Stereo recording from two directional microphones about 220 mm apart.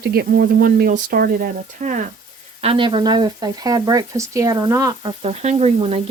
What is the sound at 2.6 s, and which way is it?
Speech, 25° right (ahead or behind).